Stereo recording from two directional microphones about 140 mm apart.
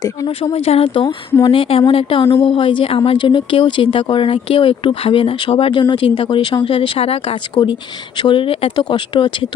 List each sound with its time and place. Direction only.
0.5 s speech: 45° left (ahead or behind)
7.6 s speech: 30° left (ahead or behind)